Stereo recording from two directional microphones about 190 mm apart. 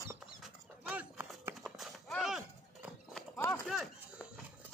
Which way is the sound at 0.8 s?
10° right (ahead or behind).